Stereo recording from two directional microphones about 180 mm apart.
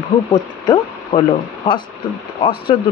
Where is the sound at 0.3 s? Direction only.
25° left (ahead or behind).